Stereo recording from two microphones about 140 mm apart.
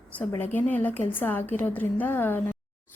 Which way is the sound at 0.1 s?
15° left (ahead or behind).